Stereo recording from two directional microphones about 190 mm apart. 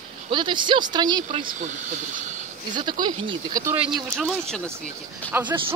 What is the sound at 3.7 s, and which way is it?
Speech, centre (ahead or behind).